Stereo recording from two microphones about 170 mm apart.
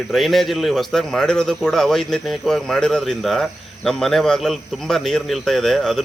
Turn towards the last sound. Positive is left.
turn(degrees=0)  # may be behind; listen again after turning